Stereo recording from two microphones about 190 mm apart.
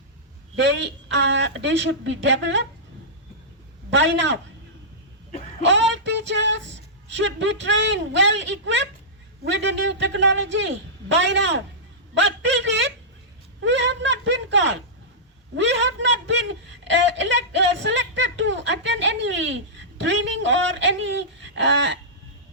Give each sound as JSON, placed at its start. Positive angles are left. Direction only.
{"t": 0.5, "sound": "a man's voice", "side_deg": -70}
{"t": 3.8, "sound": "a man's voice", "side_deg": -70}
{"t": 5.6, "sound": "a man's voice", "side_deg": -70}